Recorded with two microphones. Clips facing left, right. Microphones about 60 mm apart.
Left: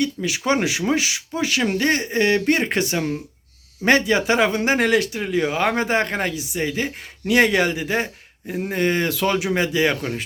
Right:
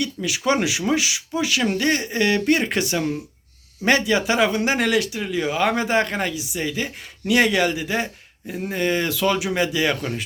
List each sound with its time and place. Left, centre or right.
0.0 s speech: left